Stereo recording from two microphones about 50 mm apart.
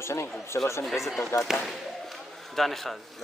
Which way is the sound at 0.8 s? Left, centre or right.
Centre.